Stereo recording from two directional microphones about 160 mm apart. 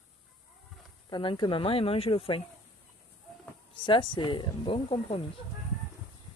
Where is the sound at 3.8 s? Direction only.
30° left (ahead or behind).